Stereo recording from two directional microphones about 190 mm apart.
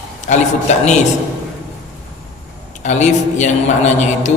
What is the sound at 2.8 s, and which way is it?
A man's voice, 40° left (ahead or behind).